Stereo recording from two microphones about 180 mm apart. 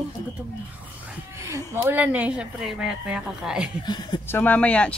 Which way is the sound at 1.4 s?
15° right (ahead or behind).